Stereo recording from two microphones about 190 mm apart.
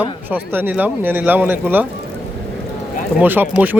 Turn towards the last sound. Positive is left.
turn(degrees=-10)  # may be behind; listen again after turning